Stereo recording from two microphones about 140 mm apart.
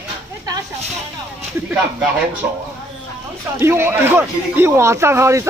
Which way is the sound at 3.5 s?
15° right (ahead or behind).